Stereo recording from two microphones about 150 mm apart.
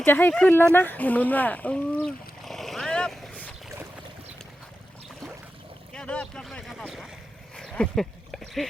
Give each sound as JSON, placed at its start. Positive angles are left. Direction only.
{"t": 0.0, "sound": "speech", "side_deg": 15}
{"t": 2.0, "sound": "boat", "side_deg": 0}
{"t": 5.9, "sound": "speech", "side_deg": 5}
{"t": 7.5, "sound": "a sound", "side_deg": 5}